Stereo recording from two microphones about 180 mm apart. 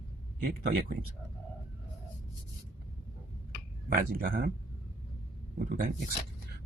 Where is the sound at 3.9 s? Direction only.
55° right (ahead or behind).